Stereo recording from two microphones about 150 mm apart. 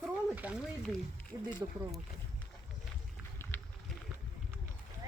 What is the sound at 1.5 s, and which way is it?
Speech, 30° right (ahead or behind).